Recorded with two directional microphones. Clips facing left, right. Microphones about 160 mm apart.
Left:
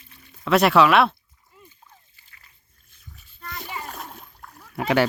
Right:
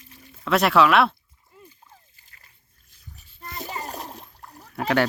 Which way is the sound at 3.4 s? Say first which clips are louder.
Right 1 dB; 40° right (ahead or behind).